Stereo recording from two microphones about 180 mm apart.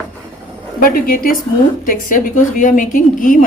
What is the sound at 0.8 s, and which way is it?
A woman's voice, 55° left (ahead or behind).